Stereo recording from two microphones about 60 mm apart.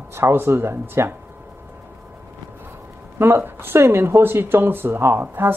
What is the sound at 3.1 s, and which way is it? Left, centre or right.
Speech, right.